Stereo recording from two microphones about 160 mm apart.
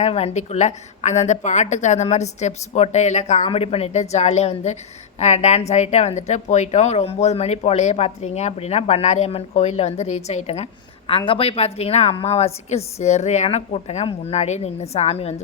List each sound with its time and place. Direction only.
0.0 s a woman's voice: 40° left (ahead or behind)